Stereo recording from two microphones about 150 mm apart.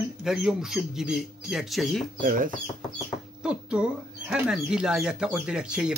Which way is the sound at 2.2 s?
65° right (ahead or behind).